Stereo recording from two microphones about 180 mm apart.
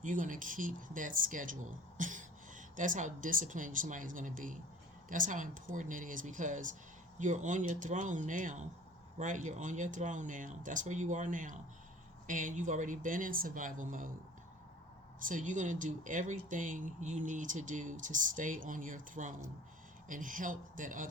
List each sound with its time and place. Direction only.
0.0 s speech: 45° right (ahead or behind)
15.3 s speech: 45° right (ahead or behind)